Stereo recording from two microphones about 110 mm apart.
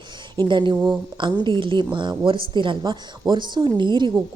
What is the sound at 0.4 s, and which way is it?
A woman's voice, 45° right (ahead or behind).